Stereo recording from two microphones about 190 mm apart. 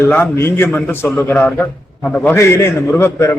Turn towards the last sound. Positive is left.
turn(degrees=15)  # may be behind; listen again after turning